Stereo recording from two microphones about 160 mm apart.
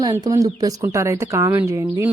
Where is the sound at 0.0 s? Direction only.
20° right (ahead or behind).